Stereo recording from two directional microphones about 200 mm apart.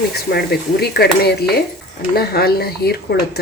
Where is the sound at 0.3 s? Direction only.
55° left (ahead or behind).